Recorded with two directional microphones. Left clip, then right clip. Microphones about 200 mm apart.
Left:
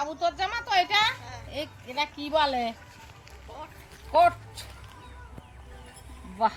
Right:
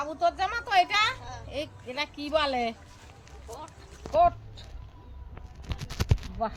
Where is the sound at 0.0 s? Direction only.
5° right (ahead or behind).